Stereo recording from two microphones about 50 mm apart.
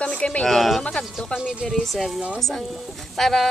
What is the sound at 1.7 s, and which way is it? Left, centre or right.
Speech, centre.